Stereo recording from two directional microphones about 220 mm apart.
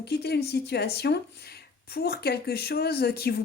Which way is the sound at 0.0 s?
45° left (ahead or behind).